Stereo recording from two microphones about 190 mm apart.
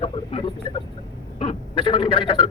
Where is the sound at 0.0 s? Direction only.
30° left (ahead or behind).